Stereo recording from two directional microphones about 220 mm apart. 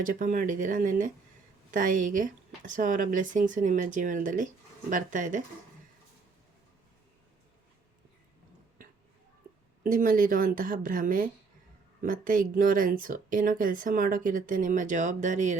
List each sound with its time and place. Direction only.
0.0 s speech: 40° right (ahead or behind)
9.8 s speech: 40° right (ahead or behind)